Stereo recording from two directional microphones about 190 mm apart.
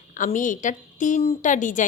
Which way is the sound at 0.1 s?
40° left (ahead or behind).